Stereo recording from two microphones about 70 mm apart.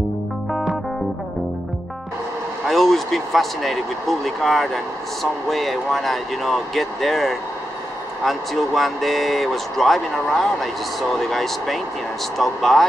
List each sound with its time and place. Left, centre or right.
2.6 s speech: centre